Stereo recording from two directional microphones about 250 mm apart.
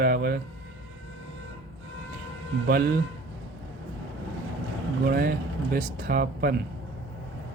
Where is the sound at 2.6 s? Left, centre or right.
Right.